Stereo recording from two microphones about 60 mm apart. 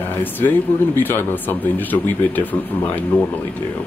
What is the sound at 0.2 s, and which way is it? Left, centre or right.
Speech, left.